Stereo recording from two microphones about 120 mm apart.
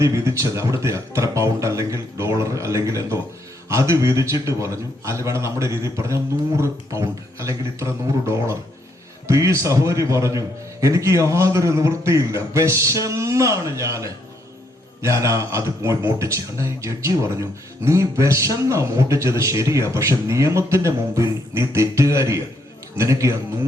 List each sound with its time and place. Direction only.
0.0 s a man's voice: 25° right (ahead or behind)